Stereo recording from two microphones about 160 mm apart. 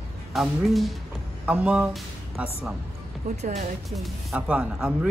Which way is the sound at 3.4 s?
45° right (ahead or behind).